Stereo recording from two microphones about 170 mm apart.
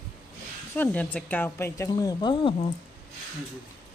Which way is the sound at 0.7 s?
10° left (ahead or behind).